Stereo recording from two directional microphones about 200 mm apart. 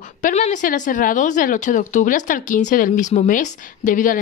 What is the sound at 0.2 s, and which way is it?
Speech, 35° left (ahead or behind).